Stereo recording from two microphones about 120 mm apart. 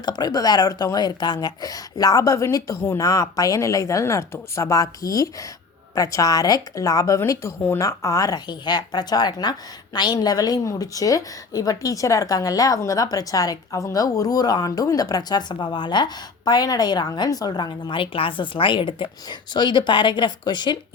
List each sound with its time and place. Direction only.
0.0 s speech: 35° left (ahead or behind)